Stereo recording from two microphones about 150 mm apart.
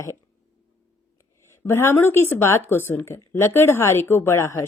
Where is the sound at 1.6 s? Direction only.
15° left (ahead or behind).